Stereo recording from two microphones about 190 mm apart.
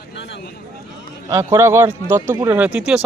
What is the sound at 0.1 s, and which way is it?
Speech, 70° left (ahead or behind).